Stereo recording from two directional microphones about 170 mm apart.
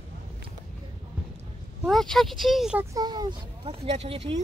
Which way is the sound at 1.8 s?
Centre (ahead or behind).